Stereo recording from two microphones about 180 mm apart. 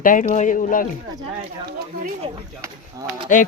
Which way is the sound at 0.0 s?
45° left (ahead or behind).